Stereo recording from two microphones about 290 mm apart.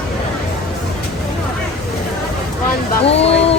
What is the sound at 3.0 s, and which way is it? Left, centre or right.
Speech, left.